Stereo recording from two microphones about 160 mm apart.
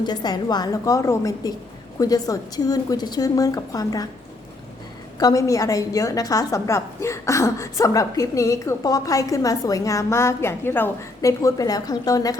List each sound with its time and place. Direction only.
0.0 s a woman's voice: 25° left (ahead or behind)
5.2 s a woman's voice: 20° left (ahead or behind)